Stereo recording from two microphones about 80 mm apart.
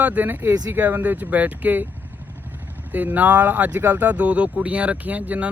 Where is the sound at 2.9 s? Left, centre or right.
Right.